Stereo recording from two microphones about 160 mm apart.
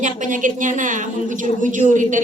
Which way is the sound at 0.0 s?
55° right (ahead or behind).